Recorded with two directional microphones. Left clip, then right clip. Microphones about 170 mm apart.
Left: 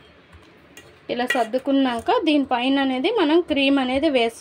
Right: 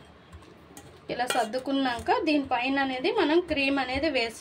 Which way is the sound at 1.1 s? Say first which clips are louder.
Left 6 dB; 40° left (ahead or behind).